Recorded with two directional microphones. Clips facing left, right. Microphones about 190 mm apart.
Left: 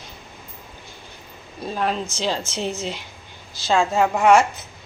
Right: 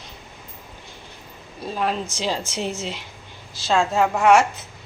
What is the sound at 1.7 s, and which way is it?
Speech, centre (ahead or behind).